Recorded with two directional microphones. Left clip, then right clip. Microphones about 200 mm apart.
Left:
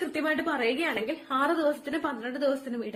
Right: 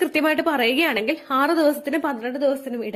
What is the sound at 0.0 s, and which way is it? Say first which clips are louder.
A woman's voice: right 9 dB; 50° right (ahead or behind).